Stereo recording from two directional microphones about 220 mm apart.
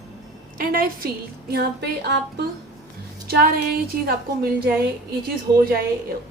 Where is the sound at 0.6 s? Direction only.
40° right (ahead or behind).